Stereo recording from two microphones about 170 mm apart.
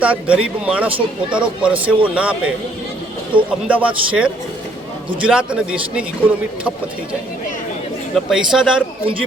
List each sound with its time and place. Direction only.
0.0 s speech: 10° right (ahead or behind)
3.7 s a man's voice: 10° right (ahead or behind)
8.1 s a man's voice: 5° right (ahead or behind)